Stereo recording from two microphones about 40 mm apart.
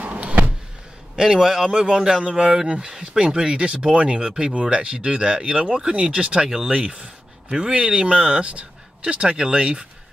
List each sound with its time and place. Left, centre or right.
0.0 s power windows: right
1.1 s speech: centre
7.0 s speech: centre